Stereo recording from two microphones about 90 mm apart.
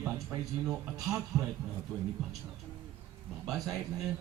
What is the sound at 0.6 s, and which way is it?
Speech, 10° right (ahead or behind).